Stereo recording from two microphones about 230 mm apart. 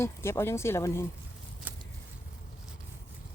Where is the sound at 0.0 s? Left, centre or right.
Centre.